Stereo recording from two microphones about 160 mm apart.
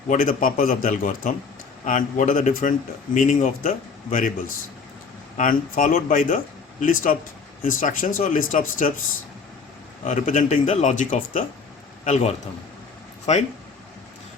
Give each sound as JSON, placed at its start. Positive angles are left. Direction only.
{"t": 0.1, "sound": "speech", "side_deg": 55}
{"t": 5.4, "sound": "speech", "side_deg": 60}
{"t": 10.0, "sound": "speech", "side_deg": 50}